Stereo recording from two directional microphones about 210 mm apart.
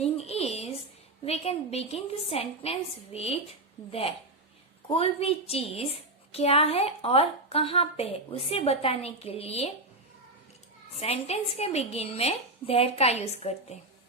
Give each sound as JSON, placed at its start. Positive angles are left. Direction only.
{"t": 0.0, "sound": "a sound", "side_deg": 30}
{"t": 1.2, "sound": "a woman's voice", "side_deg": 30}
{"t": 4.9, "sound": "a woman's voice", "side_deg": 25}
{"t": 11.0, "sound": "a woman's voice", "side_deg": 30}